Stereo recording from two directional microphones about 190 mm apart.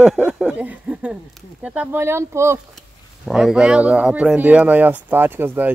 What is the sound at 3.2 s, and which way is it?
Speech, centre (ahead or behind).